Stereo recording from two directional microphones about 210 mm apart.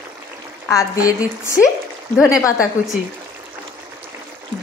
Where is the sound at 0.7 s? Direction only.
15° left (ahead or behind).